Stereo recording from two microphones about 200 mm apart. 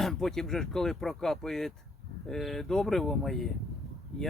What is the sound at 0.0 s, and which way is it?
Speech, centre (ahead or behind).